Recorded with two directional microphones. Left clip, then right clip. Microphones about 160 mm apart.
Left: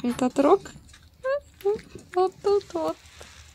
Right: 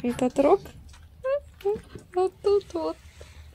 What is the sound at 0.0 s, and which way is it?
Speech, 5° right (ahead or behind).